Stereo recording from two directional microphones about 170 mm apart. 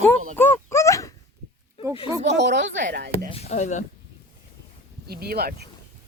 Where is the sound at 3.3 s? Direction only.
40° left (ahead or behind).